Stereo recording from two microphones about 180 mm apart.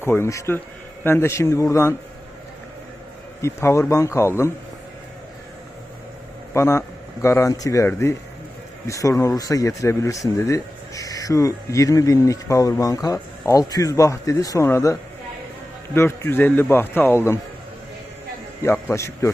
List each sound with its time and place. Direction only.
0.0 s speech: 15° left (ahead or behind)
3.4 s speech: 15° left (ahead or behind)
6.5 s speech: 15° left (ahead or behind)
16.0 s speech: 15° left (ahead or behind)
18.6 s a man's voice: 15° left (ahead or behind)